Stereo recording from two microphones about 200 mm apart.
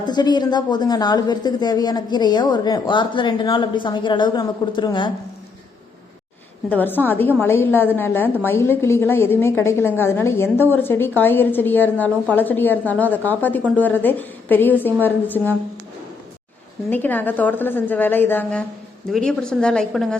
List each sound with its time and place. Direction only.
0.0 s a woman's voice: 20° left (ahead or behind)
6.7 s a woman's voice: 10° left (ahead or behind)
16.9 s a woman's voice: 10° left (ahead or behind)